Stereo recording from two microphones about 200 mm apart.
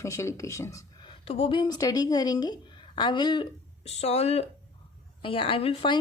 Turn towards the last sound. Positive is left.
turn(degrees=25)  # may be behind; listen again after turning